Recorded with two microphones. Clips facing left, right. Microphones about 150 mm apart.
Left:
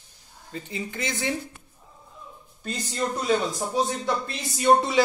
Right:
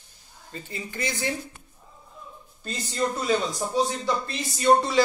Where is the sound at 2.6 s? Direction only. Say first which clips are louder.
Right 1 dB; centre (ahead or behind).